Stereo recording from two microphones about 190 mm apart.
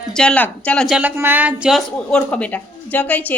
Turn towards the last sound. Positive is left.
turn(degrees=10)  # may be behind; listen again after turning